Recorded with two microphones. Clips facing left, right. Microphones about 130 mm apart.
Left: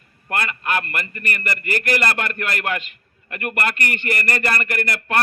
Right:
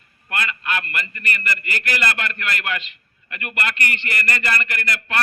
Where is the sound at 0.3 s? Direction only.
45° left (ahead or behind).